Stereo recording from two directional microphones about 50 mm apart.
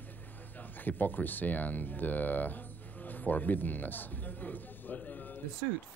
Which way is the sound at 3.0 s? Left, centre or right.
Left.